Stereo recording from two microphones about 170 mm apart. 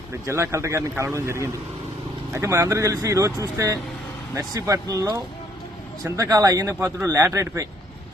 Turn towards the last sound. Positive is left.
turn(degrees=-15)  # may be behind; listen again after turning